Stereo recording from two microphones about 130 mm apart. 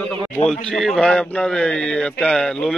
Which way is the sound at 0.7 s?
5° left (ahead or behind).